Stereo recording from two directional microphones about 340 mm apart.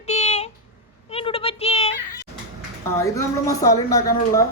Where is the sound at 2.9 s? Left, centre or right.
Centre.